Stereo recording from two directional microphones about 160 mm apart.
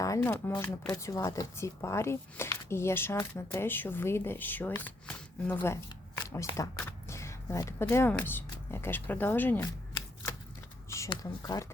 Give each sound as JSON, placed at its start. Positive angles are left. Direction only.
{"t": 0.2, "sound": "speech", "side_deg": 15}
{"t": 10.8, "sound": "a sound", "side_deg": 20}
{"t": 11.1, "sound": "speech", "side_deg": 20}